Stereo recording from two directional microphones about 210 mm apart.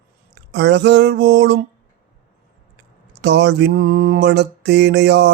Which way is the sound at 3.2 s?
55° right (ahead or behind).